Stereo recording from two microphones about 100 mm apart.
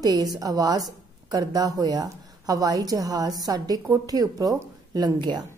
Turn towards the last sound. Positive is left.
turn(degrees=-45)  # may be behind; listen again after turning